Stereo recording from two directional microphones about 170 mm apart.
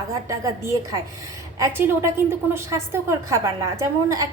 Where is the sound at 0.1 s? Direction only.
20° right (ahead or behind).